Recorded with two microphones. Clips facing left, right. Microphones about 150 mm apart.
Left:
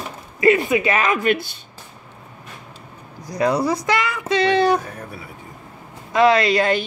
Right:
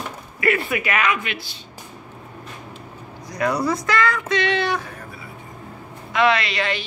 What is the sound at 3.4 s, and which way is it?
A woman's voice, 25° left (ahead or behind).